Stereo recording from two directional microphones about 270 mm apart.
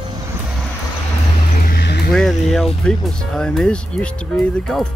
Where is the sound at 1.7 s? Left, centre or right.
Left.